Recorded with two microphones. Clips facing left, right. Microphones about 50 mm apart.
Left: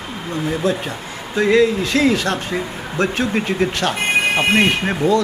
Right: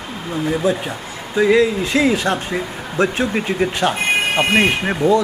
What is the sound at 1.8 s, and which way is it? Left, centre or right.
A man's voice, centre.